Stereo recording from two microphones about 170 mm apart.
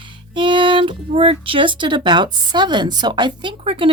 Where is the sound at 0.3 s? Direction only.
30° right (ahead or behind).